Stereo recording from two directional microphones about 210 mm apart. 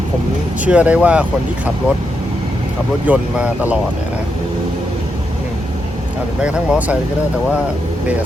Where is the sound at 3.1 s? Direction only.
5° right (ahead or behind).